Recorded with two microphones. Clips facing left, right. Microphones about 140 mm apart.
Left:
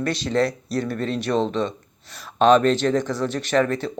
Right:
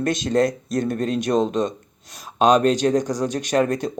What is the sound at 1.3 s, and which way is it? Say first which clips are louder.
Speech: right 2 dB; 15° right (ahead or behind).